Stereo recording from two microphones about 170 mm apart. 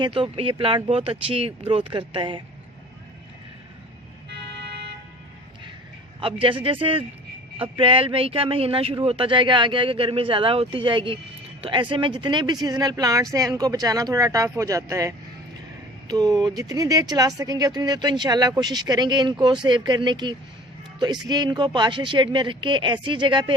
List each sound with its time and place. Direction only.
0.0 s speech: 30° right (ahead or behind)
6.1 s speech: 30° right (ahead or behind)